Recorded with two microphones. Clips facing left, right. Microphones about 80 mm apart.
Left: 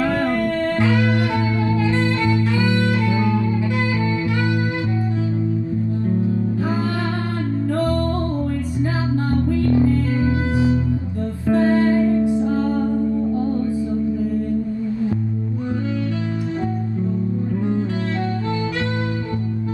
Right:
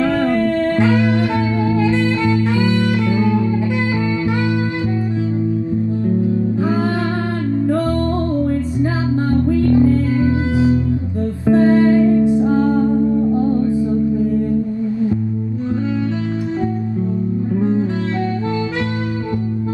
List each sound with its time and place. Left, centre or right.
0.4 s music: right
2.2 s music: right
2.7 s music: left
9.3 s music: right
11.4 s music: right
17.6 s music: right